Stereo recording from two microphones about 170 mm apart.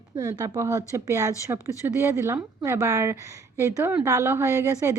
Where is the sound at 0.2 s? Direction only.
20° right (ahead or behind).